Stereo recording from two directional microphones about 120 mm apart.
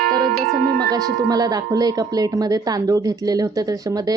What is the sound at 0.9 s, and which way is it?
Speech, 30° right (ahead or behind).